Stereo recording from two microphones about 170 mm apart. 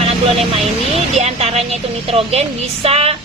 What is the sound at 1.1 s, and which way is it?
A woman's voice, 40° right (ahead or behind).